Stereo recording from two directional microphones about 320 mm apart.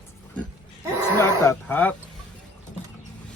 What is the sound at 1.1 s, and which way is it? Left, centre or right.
Speech, centre.